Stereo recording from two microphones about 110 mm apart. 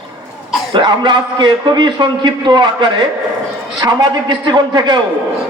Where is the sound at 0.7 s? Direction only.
45° right (ahead or behind).